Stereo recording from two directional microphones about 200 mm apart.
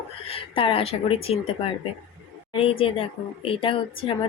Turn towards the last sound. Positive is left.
turn(degrees=25)  # may be behind; listen again after turning